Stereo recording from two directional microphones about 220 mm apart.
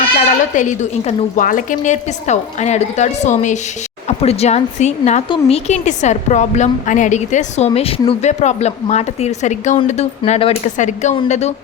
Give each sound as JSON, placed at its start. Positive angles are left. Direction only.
{"t": 0.5, "sound": "a woman's voice", "side_deg": 35}